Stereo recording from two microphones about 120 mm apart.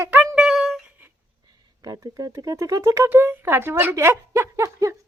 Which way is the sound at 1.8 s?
30° right (ahead or behind).